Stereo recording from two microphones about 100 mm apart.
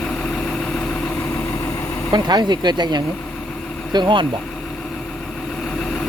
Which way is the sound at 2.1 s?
45° right (ahead or behind).